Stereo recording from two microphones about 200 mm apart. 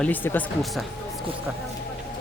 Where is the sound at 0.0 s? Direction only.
10° left (ahead or behind).